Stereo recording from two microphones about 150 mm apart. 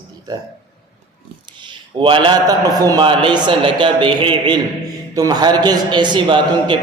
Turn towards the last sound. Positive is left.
turn(degrees=-30)  # may be behind; listen again after turning